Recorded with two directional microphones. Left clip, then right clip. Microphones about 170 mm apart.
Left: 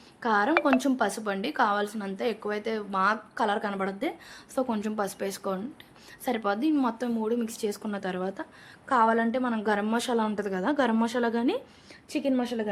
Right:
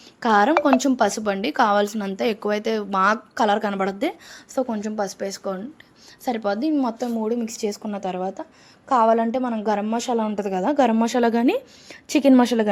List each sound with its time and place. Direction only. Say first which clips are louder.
0.2 s a woman's voice: right 7 dB; 45° right (ahead or behind)
4.6 s a woman's voice: right 4 dB; 10° right (ahead or behind)
7.8 s a woman's voice: right 5 dB; 10° right (ahead or behind)
11.0 s a woman's voice: right 7 dB; 35° right (ahead or behind)
12.0 s a woman's voice: right 12 dB; 60° right (ahead or behind)